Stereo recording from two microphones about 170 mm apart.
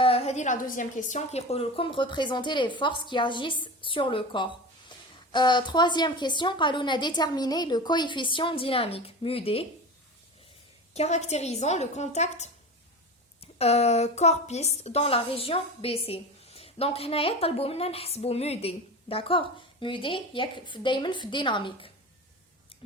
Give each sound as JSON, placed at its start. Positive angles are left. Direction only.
{"t": 0.0, "sound": "a woman's voice", "side_deg": 35}
{"t": 10.9, "sound": "a woman's voice", "side_deg": 40}